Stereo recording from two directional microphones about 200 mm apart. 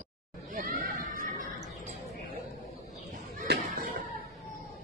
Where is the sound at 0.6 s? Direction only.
45° right (ahead or behind).